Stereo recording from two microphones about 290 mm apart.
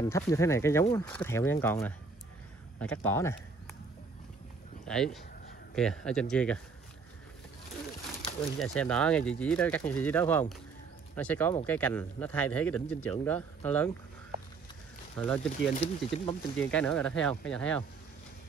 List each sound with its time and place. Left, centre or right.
0.0 s speech: centre
4.8 s speech: centre
8.5 s speech: centre
15.1 s speech: centre
15.7 s speech: left
16.5 s speech: centre